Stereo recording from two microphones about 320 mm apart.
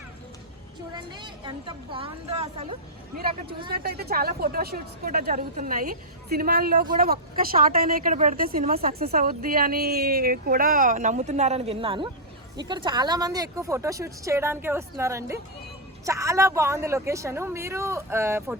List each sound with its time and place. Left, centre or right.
0.9 s speech: centre
3.7 s speech: right; by 18.5 s centre